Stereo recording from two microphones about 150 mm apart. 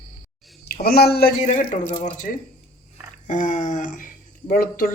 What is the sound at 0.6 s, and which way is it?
Speech, 90° left.